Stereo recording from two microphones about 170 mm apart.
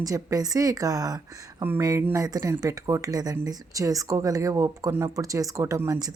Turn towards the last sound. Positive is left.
turn(degrees=-20)  # may be behind; listen again after turning